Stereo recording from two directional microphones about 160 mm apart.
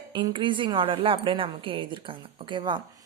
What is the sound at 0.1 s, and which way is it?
A woman's voice, 30° right (ahead or behind).